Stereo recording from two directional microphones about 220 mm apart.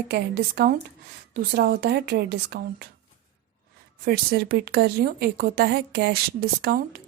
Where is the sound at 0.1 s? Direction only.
45° right (ahead or behind).